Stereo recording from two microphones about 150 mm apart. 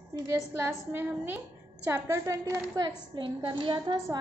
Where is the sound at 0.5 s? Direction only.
15° right (ahead or behind).